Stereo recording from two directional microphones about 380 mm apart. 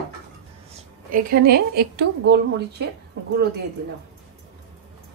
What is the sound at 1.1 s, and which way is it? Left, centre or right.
A woman's voice, right.